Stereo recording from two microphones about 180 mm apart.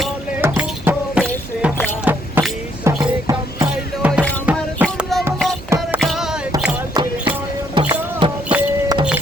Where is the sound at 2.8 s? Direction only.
20° right (ahead or behind).